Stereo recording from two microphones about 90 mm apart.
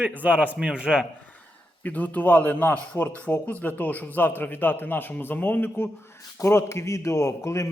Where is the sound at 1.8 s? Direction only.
15° left (ahead or behind).